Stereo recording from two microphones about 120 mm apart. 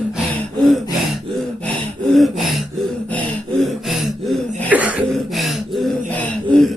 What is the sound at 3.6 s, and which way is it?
Gasp, centre (ahead or behind).